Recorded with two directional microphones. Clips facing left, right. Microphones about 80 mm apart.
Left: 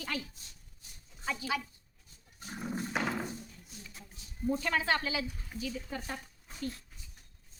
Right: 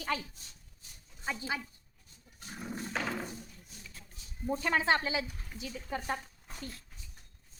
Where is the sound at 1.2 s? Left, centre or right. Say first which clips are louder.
Left 2 dB; right.